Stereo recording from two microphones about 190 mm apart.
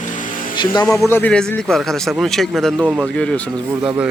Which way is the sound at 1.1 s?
10° left (ahead or behind).